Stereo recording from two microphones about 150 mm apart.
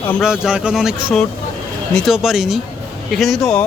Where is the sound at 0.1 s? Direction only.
Centre (ahead or behind).